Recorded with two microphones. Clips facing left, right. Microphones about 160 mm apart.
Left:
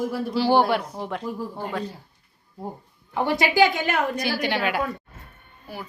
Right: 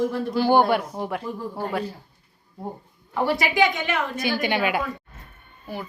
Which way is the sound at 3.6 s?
35° left (ahead or behind).